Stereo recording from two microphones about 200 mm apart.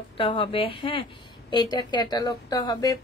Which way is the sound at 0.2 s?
25° left (ahead or behind).